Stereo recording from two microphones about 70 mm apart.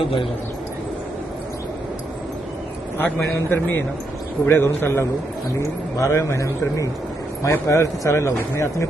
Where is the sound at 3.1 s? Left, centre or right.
Left.